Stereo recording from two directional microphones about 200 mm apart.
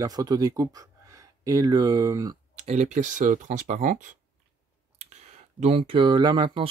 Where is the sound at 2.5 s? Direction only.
35° right (ahead or behind).